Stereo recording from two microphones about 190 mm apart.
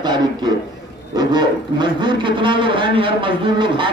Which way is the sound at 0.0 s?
20° right (ahead or behind).